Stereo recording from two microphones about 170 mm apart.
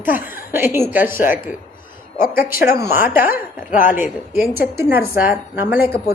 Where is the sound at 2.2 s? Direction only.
55° left (ahead or behind).